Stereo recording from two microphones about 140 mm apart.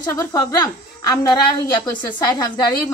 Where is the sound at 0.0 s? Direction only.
25° left (ahead or behind).